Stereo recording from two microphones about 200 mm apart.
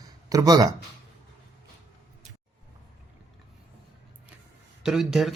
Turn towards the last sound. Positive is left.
turn(degrees=0)  # may be behind; listen again after turning